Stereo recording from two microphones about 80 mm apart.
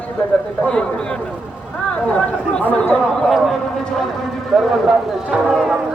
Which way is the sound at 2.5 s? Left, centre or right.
Centre.